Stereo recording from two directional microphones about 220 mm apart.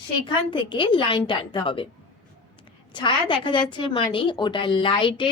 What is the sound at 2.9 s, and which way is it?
A woman's voice, 20° left (ahead or behind).